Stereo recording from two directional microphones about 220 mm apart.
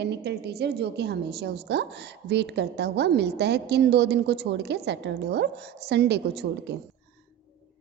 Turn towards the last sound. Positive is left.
turn(degrees=-50)  # may be behind; listen again after turning